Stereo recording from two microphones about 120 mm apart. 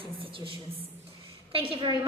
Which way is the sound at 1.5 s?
50° right (ahead or behind).